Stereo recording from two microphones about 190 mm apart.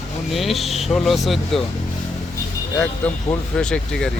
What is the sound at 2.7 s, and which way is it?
A man's voice, 10° left (ahead or behind).